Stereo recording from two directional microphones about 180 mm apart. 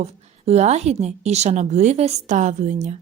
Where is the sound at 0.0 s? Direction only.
35° right (ahead or behind).